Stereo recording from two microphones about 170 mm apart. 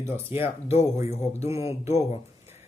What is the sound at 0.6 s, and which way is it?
Speech, 40° left (ahead or behind).